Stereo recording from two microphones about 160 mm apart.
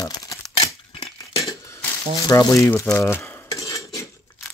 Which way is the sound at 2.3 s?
20° left (ahead or behind).